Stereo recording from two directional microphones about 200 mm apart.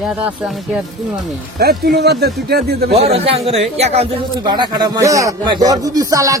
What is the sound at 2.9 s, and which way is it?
A man's voice, 30° right (ahead or behind).